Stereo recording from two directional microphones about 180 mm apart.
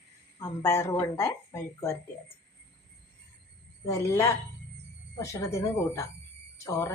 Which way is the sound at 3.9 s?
15° left (ahead or behind).